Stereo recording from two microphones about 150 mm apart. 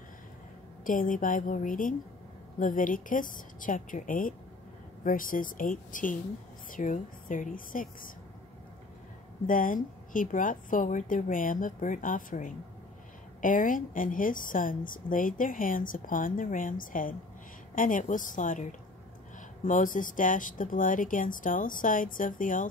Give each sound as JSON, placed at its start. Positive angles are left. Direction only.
{"t": 0.8, "sound": "a woman's voice", "side_deg": 65}
{"t": 9.5, "sound": "a woman's voice", "side_deg": 65}